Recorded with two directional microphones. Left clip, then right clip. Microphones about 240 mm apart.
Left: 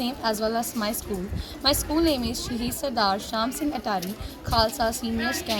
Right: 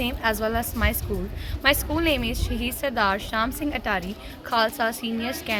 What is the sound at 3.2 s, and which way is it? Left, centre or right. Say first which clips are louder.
Speech: right 2 dB; right.